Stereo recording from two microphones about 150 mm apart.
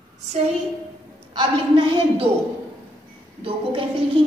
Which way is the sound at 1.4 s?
35° right (ahead or behind).